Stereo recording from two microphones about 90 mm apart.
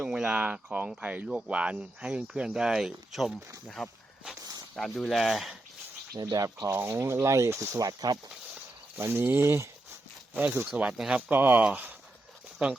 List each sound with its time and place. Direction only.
0.0 s speech: 10° right (ahead or behind)
6.3 s speech: 40° right (ahead or behind)
6.7 s speech: 25° right (ahead or behind); by 8.2 s 45° right (ahead or behind)
9.0 s speech: 25° right (ahead or behind); by 11.2 s 10° right (ahead or behind)
11.3 s speech: 20° right (ahead or behind)